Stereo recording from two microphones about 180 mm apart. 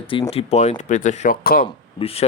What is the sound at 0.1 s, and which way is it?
Speech, 30° left (ahead or behind).